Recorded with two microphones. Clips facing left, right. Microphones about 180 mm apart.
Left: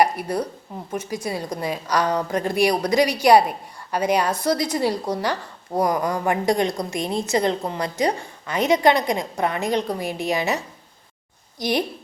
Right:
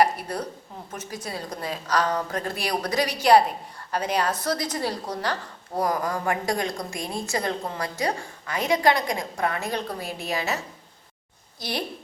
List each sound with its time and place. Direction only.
0.0 s a woman's voice: 10° left (ahead or behind)
11.6 s a woman's voice: 15° left (ahead or behind)